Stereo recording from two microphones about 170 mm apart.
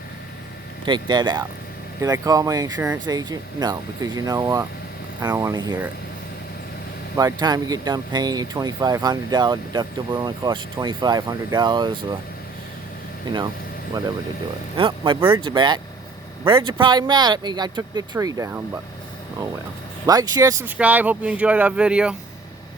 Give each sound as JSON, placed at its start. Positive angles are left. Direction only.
{"t": 0.9, "sound": "speech", "side_deg": -25}
{"t": 7.2, "sound": "speech", "side_deg": -25}
{"t": 14.8, "sound": "speech", "side_deg": -30}
{"t": 20.1, "sound": "speech", "side_deg": -20}